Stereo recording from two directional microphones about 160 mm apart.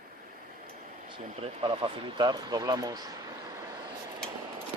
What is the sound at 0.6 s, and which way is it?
Air conditioning, 30° right (ahead or behind).